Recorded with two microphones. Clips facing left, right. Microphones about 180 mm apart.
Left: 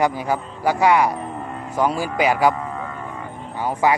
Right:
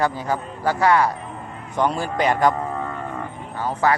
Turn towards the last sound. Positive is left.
turn(degrees=15)  # may be behind; listen again after turning